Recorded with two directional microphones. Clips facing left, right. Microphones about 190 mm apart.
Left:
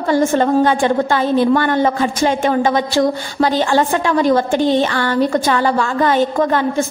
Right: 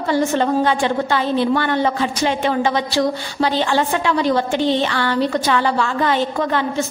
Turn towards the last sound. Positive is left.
turn(degrees=45)  # may be behind; listen again after turning